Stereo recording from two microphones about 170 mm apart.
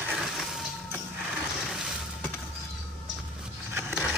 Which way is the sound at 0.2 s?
Centre (ahead or behind).